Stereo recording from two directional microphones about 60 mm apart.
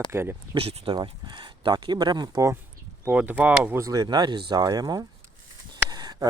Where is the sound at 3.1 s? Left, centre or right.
Right.